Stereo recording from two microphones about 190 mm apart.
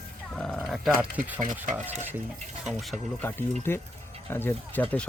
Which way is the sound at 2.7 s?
Centre (ahead or behind).